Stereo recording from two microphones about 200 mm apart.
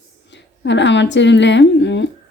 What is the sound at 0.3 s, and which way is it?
Speech, 60° left (ahead or behind).